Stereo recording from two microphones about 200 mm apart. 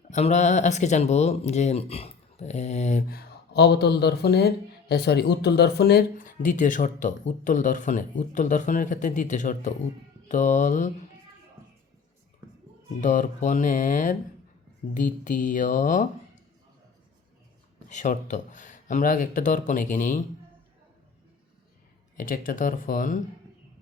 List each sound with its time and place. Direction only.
0.1 s speech: 35° left (ahead or behind)
3.1 s speech: 50° left (ahead or behind)
13.0 s speech: 40° left (ahead or behind)
17.8 s speech: 40° left (ahead or behind)
22.2 s speech: 45° left (ahead or behind)